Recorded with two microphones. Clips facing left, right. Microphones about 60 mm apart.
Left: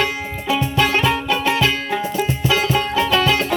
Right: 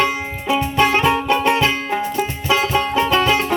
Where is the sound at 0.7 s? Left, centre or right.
Right.